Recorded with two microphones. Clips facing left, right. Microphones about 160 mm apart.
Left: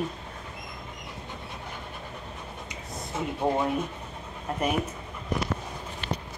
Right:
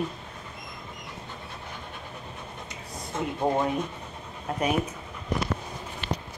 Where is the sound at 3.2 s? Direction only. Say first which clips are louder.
Right 1 dB; 5° left (ahead or behind).